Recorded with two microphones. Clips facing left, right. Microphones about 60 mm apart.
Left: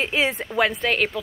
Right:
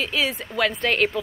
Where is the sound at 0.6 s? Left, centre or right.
Centre.